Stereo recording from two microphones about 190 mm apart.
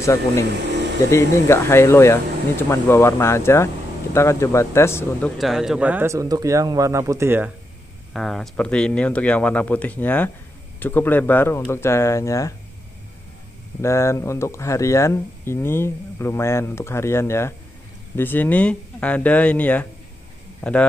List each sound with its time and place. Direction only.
0.0 s speech: 15° left (ahead or behind)
5.4 s speech: centre (ahead or behind)
8.1 s speech: centre (ahead or behind)
13.7 s speech: 15° left (ahead or behind)